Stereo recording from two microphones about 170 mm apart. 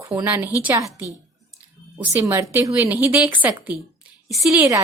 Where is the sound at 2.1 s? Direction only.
20° right (ahead or behind); by 4.7 s centre (ahead or behind).